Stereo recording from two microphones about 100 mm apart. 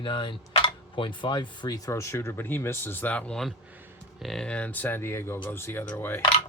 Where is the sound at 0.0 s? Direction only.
55° left (ahead or behind); by 6.1 s 20° left (ahead or behind).